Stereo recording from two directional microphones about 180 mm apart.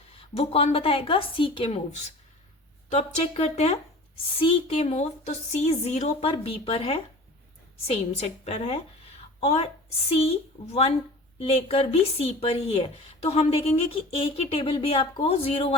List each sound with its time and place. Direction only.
0.2 s a woman's voice: 35° left (ahead or behind)
8.4 s a woman's voice: 35° left (ahead or behind)